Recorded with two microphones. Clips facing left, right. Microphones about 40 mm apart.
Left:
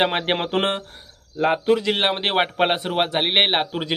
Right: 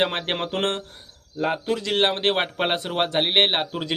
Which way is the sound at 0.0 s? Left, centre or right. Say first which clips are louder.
Left 3 dB; centre.